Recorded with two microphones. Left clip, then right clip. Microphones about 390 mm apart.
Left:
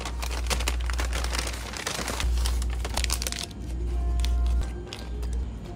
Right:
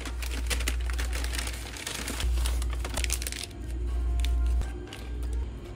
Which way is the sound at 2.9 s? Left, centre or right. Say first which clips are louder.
Left 4 dB; centre.